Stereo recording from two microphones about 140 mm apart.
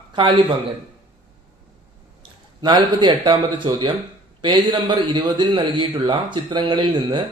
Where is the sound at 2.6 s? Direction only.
30° right (ahead or behind).